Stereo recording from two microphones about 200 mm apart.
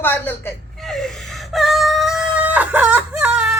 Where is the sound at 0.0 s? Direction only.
10° left (ahead or behind).